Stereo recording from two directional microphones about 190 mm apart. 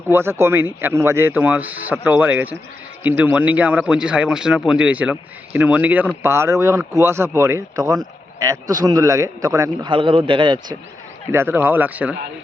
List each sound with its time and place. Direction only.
0.1 s speech: 10° right (ahead or behind)
11.3 s speech: 10° right (ahead or behind)